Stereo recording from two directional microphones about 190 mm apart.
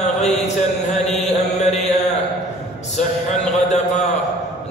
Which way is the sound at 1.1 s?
35° left (ahead or behind).